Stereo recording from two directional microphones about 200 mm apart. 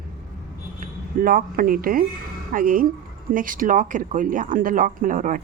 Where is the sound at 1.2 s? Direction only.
45° right (ahead or behind).